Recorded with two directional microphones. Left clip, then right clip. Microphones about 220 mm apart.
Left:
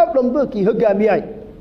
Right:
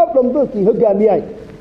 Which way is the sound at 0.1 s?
30° left (ahead or behind).